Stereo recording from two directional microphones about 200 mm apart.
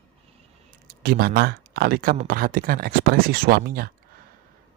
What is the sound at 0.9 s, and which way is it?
Speech, 50° right (ahead or behind).